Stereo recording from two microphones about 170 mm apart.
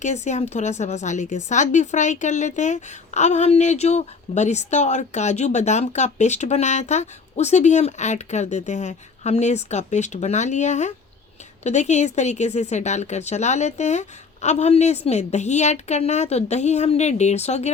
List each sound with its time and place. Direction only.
0.0 s a woman's voice: 45° left (ahead or behind)